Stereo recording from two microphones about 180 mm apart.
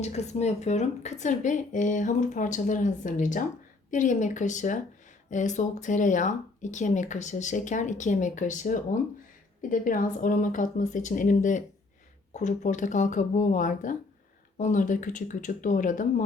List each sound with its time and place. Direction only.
0.0 s speech: 40° left (ahead or behind)